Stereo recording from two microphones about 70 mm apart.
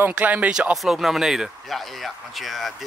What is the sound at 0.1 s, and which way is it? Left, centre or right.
Speech, right.